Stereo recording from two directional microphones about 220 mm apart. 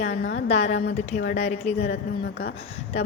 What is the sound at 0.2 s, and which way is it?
Speech, 55° left (ahead or behind).